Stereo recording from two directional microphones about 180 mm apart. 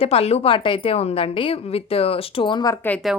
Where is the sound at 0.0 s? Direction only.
35° left (ahead or behind).